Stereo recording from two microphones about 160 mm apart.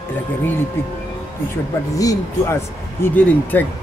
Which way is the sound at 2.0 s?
20° left (ahead or behind).